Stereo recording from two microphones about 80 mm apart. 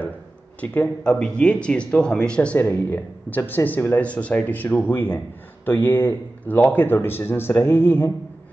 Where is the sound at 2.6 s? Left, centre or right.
Left.